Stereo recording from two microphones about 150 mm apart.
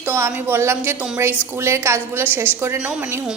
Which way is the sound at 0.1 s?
15° right (ahead or behind).